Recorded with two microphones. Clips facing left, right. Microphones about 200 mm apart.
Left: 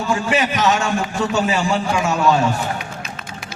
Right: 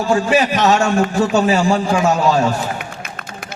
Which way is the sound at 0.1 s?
35° right (ahead or behind).